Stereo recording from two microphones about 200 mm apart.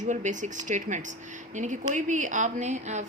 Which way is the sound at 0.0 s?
40° right (ahead or behind).